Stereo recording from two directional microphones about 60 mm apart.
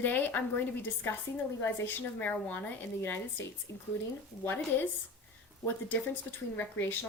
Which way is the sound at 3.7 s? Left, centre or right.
Left.